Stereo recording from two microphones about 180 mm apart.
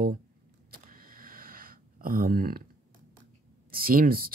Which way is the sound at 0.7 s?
50° right (ahead or behind).